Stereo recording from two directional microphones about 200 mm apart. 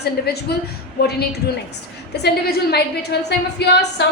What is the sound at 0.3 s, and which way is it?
Speech, 55° left (ahead or behind).